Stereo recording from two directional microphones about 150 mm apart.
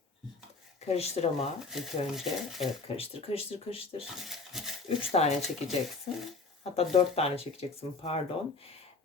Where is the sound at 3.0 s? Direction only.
40° left (ahead or behind).